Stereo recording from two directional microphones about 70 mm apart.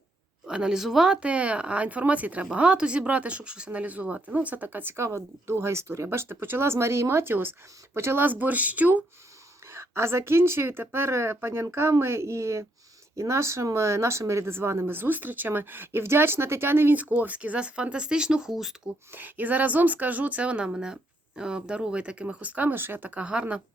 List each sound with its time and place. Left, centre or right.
0.4 s speech: centre
9.6 s speech: right
17.0 s speech: right
19.1 s speech: right